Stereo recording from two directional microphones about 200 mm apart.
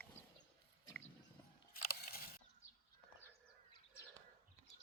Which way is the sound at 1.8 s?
50° left (ahead or behind).